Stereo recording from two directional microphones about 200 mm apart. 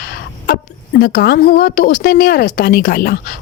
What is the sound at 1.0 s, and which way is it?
A woman's voice, 55° left (ahead or behind).